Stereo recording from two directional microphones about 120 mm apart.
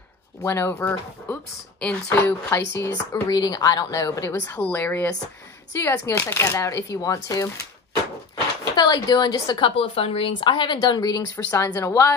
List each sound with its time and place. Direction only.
0.4 s speech: 25° left (ahead or behind)
2.0 s speech: 25° left (ahead or behind)
8.7 s speech: 35° left (ahead or behind)
9.8 s speech: 50° left (ahead or behind); by 12.2 s 25° left (ahead or behind)